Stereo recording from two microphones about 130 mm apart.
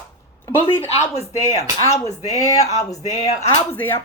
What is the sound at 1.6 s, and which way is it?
Speech, 25° left (ahead or behind).